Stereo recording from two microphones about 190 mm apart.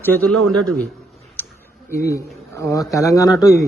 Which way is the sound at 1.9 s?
15° left (ahead or behind).